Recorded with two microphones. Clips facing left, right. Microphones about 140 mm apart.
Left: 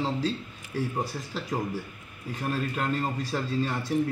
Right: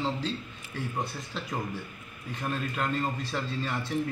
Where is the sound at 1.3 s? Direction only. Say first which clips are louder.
Left 3 dB; 35° left (ahead or behind).